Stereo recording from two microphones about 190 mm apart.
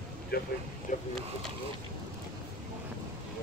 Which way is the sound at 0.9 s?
40° left (ahead or behind).